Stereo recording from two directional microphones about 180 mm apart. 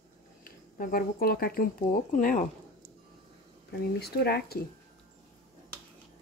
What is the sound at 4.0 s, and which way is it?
Speech, 60° left (ahead or behind).